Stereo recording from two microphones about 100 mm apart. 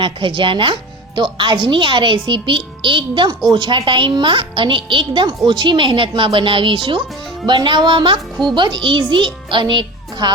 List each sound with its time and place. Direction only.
0.0 s a woman's voice: 55° right (ahead or behind)